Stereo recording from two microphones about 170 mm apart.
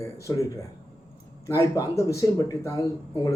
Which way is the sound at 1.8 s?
20° left (ahead or behind).